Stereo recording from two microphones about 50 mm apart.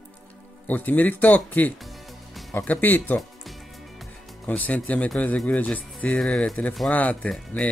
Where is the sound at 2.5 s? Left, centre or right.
Left.